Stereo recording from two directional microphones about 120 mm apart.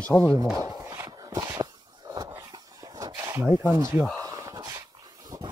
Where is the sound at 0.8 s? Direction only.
25° right (ahead or behind).